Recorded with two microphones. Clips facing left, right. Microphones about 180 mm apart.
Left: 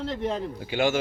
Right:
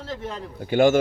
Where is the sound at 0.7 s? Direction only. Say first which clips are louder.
Right 7 dB; 50° right (ahead or behind).